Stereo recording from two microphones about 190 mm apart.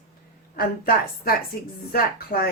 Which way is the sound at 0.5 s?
50° left (ahead or behind).